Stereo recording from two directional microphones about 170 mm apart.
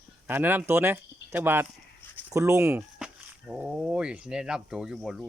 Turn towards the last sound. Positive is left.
turn(degrees=-5)  # may be behind; listen again after turning